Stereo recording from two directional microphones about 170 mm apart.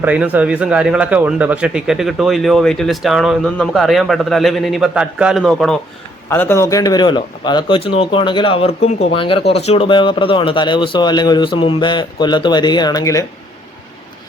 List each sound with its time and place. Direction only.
0.0 s speech: 10° right (ahead or behind)
6.2 s speech: 15° left (ahead or behind)